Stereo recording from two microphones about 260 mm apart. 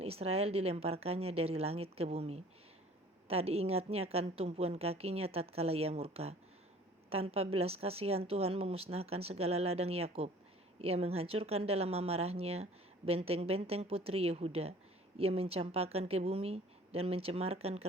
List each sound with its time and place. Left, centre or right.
0.0 s a woman's voice: right